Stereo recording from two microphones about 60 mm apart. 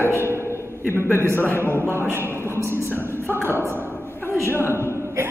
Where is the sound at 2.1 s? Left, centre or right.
Left.